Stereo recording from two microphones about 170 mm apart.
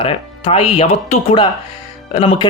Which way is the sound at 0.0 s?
35° left (ahead or behind).